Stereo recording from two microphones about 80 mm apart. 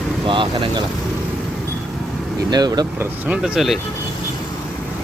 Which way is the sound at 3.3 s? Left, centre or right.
Centre.